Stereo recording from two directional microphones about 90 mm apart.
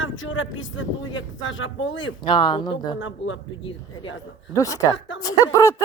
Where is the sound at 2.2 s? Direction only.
60° left (ahead or behind).